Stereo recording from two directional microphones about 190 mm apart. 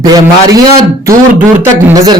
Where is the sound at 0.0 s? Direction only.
20° right (ahead or behind).